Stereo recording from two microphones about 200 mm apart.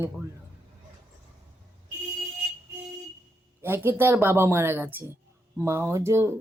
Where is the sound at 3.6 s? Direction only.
10° right (ahead or behind).